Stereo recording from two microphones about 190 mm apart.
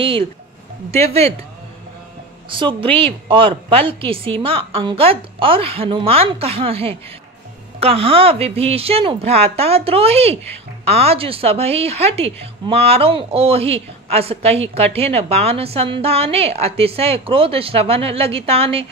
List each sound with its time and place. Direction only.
0.0 s a woman's voice: 30° right (ahead or behind)
2.5 s a woman's voice: 25° right (ahead or behind)